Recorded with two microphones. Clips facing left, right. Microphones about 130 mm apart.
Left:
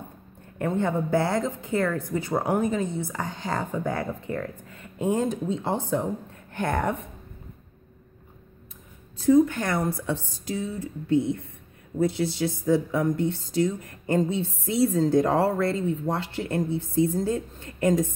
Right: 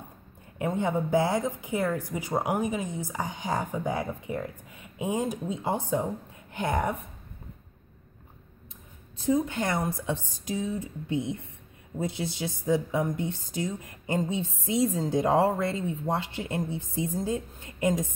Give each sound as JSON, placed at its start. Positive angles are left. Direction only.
{"t": 0.6, "sound": "speech", "side_deg": -15}
{"t": 9.2, "sound": "speech", "side_deg": -20}